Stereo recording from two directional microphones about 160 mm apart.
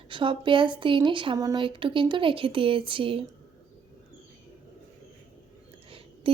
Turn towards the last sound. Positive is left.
turn(degrees=-35)  # may be behind; listen again after turning